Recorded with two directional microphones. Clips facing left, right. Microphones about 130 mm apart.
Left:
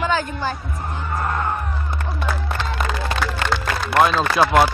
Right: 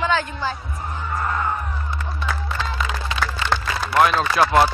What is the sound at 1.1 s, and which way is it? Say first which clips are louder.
Music: left 1 dB; 40° left (ahead or behind).